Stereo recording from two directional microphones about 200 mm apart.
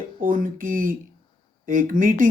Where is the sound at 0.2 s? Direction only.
45° right (ahead or behind).